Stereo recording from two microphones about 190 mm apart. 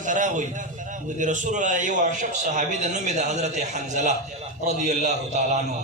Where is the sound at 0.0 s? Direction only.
40° right (ahead or behind).